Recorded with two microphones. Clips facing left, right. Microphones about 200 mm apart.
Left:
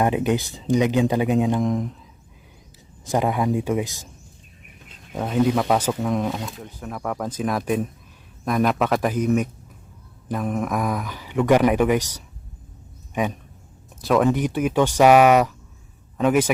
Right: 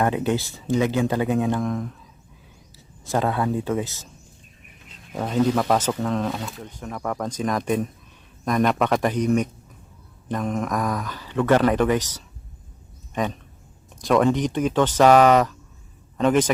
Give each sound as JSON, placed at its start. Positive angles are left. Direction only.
{"t": 0.0, "sound": "speech", "side_deg": 15}
{"t": 3.0, "sound": "speech", "side_deg": 15}
{"t": 5.1, "sound": "speech", "side_deg": 5}